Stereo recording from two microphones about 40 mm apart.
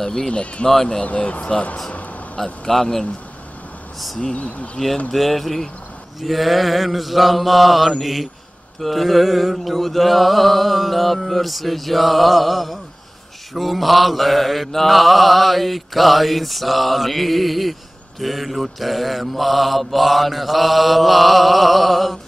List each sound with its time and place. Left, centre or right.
0.0 s a man's voice: centre
0.3 s speech: left
2.3 s a man's voice: centre
4.2 s speech: left
5.1 s mantra: centre